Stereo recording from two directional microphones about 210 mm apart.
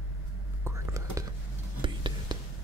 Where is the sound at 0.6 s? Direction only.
15° right (ahead or behind).